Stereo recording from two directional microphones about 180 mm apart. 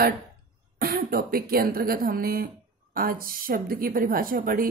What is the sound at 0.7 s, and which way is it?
A woman's voice, 55° right (ahead or behind).